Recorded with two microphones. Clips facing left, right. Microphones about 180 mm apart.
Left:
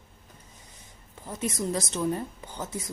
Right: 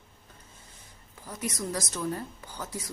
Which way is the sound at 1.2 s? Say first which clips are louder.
Left 4 dB; 25° left (ahead or behind).